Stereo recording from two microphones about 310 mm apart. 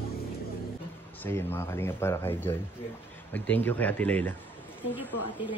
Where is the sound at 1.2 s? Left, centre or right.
Centre.